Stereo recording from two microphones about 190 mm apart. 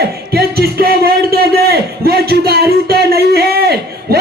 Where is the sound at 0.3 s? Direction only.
55° right (ahead or behind).